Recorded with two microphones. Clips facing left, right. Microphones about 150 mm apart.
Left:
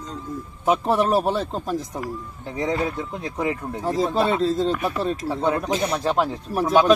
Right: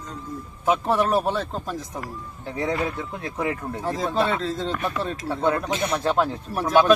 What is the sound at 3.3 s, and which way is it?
Speech, 5° left (ahead or behind).